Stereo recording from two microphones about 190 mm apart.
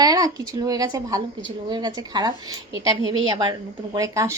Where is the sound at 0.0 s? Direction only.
20° right (ahead or behind).